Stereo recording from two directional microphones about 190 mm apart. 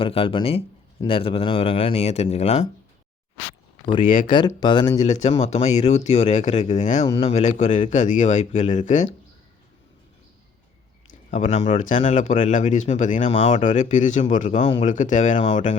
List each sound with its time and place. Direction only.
0.0 s speech: 30° left (ahead or behind)
4.0 s speech: 45° left (ahead or behind)
4.3 s speech: 25° left (ahead or behind)
4.9 s speech: 35° left (ahead or behind)
11.3 s speech: 40° left (ahead or behind)